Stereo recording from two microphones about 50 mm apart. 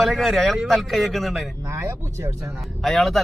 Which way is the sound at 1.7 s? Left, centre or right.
Right.